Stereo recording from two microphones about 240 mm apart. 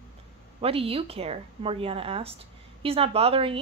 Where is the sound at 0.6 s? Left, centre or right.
Right.